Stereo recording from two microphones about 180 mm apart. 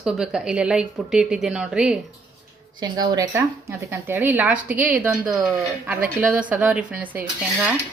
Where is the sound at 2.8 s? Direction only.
20° right (ahead or behind).